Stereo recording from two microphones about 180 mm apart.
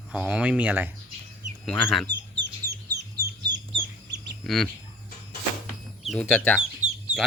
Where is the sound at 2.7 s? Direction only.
65° right (ahead or behind).